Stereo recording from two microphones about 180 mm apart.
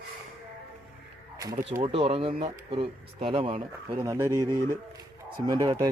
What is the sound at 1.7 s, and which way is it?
Speech, 35° right (ahead or behind).